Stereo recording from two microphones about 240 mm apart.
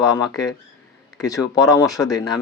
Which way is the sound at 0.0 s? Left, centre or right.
Centre.